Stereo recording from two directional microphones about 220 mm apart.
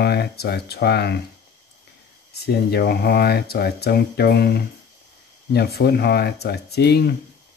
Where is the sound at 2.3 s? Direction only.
45° left (ahead or behind).